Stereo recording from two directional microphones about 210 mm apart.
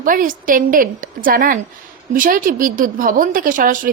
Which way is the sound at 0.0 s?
40° right (ahead or behind).